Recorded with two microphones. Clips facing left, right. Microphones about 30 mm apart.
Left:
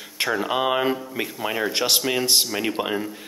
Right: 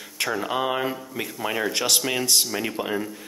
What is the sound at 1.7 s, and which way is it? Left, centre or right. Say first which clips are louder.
Speech: left 3 dB; left.